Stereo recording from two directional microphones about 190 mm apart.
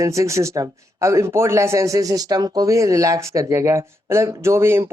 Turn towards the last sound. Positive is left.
turn(degrees=-15)  # may be behind; listen again after turning